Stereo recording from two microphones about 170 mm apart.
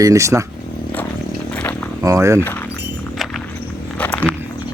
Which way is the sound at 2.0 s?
15° right (ahead or behind).